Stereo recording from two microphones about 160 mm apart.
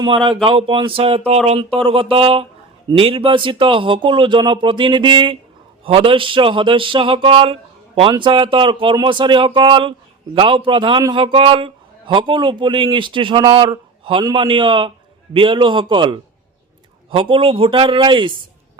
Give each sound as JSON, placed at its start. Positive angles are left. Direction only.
{"t": 0.0, "sound": "a man's voice", "side_deg": -35}